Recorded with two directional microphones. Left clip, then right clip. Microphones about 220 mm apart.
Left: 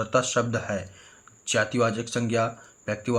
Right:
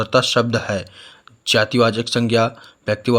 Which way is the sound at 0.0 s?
45° right (ahead or behind).